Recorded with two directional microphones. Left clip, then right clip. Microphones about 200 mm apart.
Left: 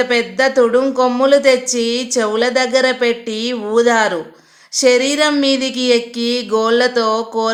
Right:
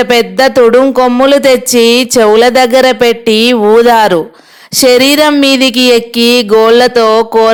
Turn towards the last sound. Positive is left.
turn(degrees=-40)  # may be behind; listen again after turning